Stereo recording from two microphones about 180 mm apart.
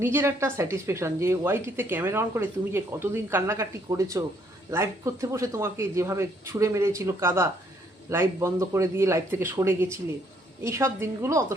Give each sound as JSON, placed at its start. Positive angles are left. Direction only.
{"t": 0.0, "sound": "speech", "side_deg": -15}